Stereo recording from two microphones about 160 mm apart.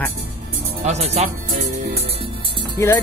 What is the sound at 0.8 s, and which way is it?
Speech, 45° right (ahead or behind).